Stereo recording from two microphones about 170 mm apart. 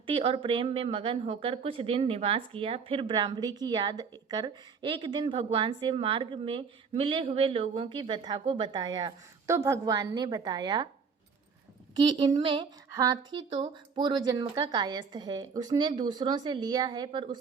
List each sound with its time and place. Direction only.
0.0 s speech: 30° right (ahead or behind)
11.9 s speech: 25° right (ahead or behind)
12.9 s speech: 20° right (ahead or behind)
13.3 s speech: 30° right (ahead or behind)